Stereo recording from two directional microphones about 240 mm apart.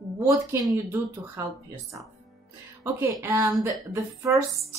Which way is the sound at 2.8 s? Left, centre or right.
Centre.